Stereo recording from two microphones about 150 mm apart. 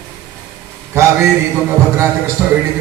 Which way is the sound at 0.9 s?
20° right (ahead or behind).